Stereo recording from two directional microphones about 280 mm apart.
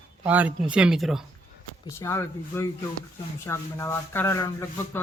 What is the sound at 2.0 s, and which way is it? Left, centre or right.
Speech, centre.